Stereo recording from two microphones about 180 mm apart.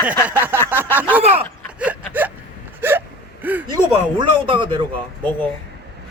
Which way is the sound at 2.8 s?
10° right (ahead or behind).